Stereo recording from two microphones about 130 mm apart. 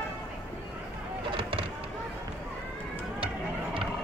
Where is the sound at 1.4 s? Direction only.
40° right (ahead or behind).